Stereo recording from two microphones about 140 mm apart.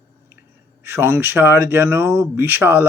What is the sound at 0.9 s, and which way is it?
Speech, 15° right (ahead or behind).